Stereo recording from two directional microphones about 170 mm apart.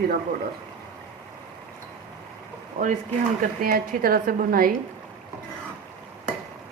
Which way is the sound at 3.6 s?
60° right (ahead or behind).